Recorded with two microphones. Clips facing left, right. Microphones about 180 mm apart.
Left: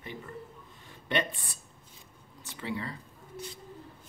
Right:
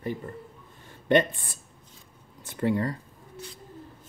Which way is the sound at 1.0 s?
50° right (ahead or behind).